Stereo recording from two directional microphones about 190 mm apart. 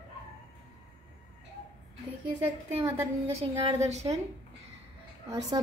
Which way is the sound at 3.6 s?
35° right (ahead or behind).